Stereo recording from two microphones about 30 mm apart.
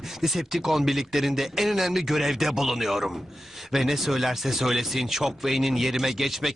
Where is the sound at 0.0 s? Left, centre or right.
Centre.